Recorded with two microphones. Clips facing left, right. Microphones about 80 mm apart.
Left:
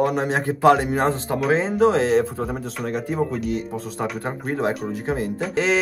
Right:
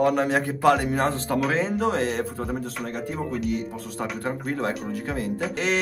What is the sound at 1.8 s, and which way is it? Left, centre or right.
Speech, left.